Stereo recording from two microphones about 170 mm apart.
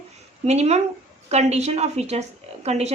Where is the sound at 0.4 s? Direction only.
40° right (ahead or behind).